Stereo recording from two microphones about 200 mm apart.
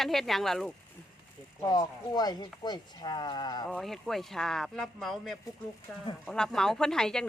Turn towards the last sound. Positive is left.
turn(degrees=5)  # may be behind; listen again after turning